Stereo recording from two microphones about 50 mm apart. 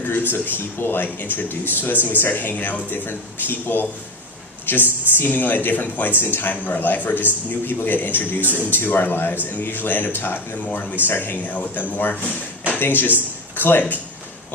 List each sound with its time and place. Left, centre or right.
0.0 s speech: left